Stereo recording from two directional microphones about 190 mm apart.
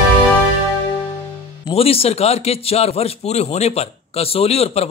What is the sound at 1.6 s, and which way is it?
A man's voice, 30° left (ahead or behind).